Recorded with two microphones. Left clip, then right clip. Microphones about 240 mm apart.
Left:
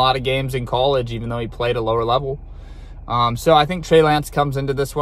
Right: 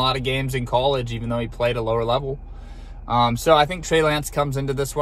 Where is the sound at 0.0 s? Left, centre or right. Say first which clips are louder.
Left 5 dB; centre.